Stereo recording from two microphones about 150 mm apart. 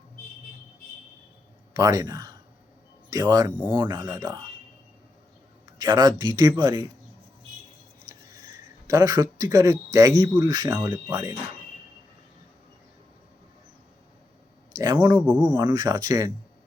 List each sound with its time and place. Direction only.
1.7 s speech: 20° right (ahead or behind)
5.8 s speech: 25° right (ahead or behind)
8.9 s speech: 20° right (ahead or behind)
14.7 s speech: 25° right (ahead or behind)
15.5 s speech: 20° right (ahead or behind)